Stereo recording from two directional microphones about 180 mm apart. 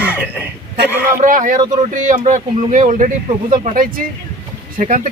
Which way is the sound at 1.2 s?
45° right (ahead or behind).